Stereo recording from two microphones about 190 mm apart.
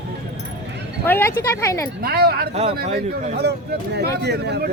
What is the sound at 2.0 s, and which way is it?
Speech, 55° right (ahead or behind).